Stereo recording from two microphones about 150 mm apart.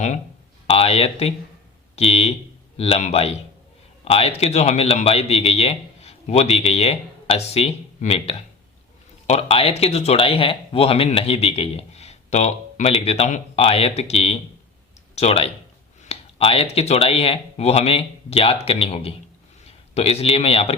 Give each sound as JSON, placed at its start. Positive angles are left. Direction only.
{"t": 0.7, "sound": "a man's voice", "side_deg": 40}